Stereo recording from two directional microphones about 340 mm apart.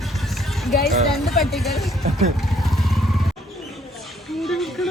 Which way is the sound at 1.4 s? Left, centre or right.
Centre.